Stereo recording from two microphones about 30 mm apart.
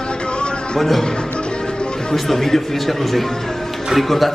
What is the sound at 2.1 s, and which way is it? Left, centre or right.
A man's voice, centre.